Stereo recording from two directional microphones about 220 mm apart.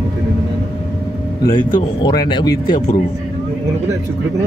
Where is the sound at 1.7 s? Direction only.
20° left (ahead or behind).